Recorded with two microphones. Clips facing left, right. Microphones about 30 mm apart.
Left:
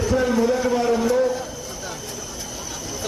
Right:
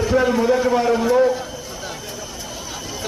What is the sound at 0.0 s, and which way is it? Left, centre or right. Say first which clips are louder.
A man's voice: right 2 dB; right.